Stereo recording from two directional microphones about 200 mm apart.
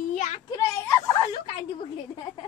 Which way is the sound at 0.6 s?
15° left (ahead or behind).